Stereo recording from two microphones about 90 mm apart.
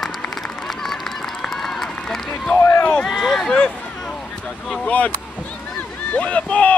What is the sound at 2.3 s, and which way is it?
Run, 15° left (ahead or behind).